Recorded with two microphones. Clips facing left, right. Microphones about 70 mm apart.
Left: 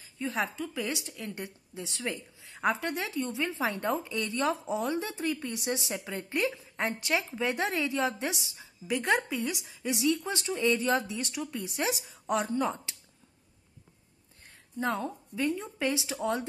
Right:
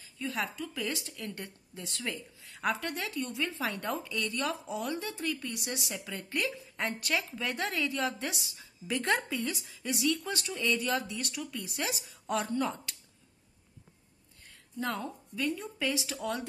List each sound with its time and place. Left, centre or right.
0.2 s a woman's voice: left
0.6 s a woman's voice: centre
8.8 s a woman's voice: centre
14.8 s a woman's voice: left